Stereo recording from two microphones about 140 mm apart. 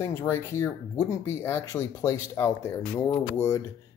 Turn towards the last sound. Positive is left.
turn(degrees=20)  # may be behind; listen again after turning